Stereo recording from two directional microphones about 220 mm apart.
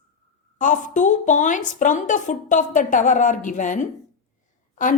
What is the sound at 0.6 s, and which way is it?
A woman's voice, 35° left (ahead or behind).